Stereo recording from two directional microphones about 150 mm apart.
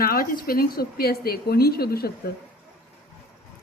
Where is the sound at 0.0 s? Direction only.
75° left (ahead or behind).